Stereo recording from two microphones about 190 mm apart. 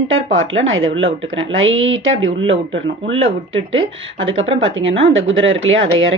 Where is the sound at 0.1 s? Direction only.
90° right.